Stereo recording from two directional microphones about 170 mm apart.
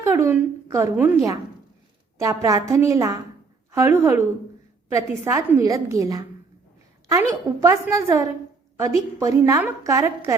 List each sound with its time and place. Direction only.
0.0 s a woman's voice: 15° right (ahead or behind)
7.6 s a woman's voice: 15° right (ahead or behind)